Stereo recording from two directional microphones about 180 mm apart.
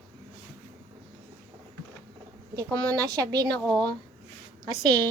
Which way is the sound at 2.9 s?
20° right (ahead or behind).